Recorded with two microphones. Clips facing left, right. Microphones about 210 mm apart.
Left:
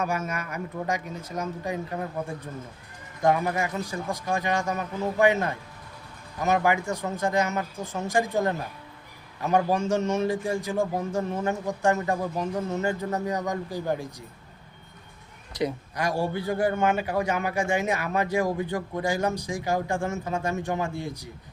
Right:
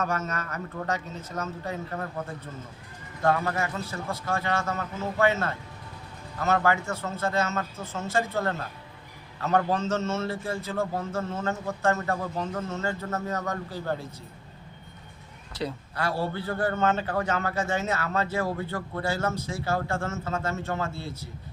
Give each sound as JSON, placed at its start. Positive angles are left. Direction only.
{"t": 0.0, "sound": "a man's voice", "side_deg": 10}
{"t": 15.5, "sound": "a man's voice", "side_deg": 15}